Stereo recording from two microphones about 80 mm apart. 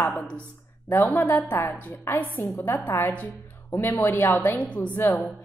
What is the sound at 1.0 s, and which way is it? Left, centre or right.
A woman's voice, left.